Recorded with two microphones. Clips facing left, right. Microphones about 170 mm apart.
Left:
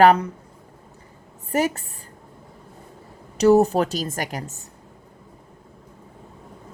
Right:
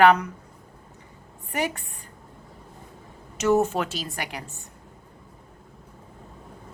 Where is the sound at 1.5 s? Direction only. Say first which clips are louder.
Left 6 dB; 40° left (ahead or behind).